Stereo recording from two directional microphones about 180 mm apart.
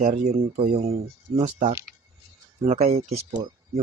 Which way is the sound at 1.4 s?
40° right (ahead or behind).